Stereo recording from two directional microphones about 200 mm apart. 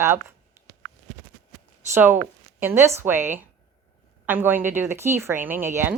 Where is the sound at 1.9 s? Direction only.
10° right (ahead or behind).